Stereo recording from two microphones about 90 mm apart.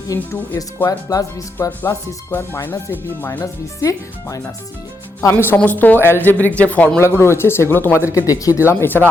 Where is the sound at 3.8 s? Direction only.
35° left (ahead or behind).